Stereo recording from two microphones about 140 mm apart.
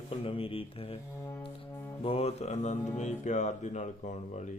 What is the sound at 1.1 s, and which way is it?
Music, 15° left (ahead or behind).